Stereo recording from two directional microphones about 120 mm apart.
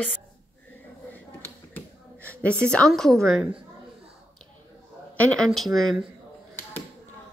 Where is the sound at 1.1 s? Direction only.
15° left (ahead or behind).